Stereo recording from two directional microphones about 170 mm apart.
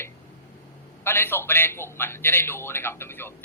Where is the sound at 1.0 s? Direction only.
15° left (ahead or behind).